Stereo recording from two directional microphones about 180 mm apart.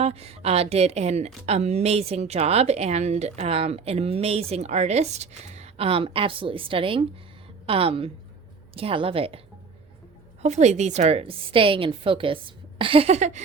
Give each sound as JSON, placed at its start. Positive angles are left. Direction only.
{"t": 0.0, "sound": "speech", "side_deg": -35}
{"t": 10.4, "sound": "speech", "side_deg": -40}